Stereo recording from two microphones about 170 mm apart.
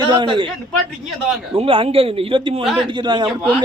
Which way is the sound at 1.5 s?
30° right (ahead or behind).